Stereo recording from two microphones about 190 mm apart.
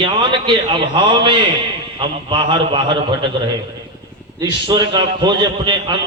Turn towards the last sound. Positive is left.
turn(degrees=-25)  # may be behind; listen again after turning